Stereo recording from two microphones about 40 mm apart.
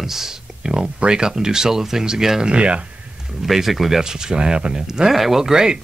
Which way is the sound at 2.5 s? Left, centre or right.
Right.